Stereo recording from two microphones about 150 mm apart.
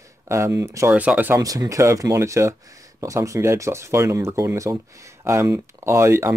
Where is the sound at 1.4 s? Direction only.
25° right (ahead or behind).